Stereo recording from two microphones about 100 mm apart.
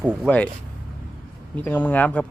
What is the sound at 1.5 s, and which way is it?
Speech, 15° left (ahead or behind).